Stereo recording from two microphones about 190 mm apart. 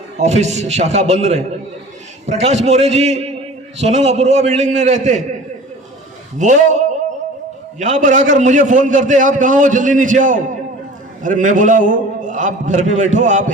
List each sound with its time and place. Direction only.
0.2 s a man's voice: 35° right (ahead or behind)
6.4 s a man's voice: 40° right (ahead or behind)